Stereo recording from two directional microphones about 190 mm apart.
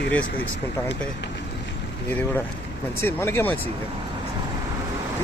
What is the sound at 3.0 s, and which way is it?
Speech, 10° left (ahead or behind).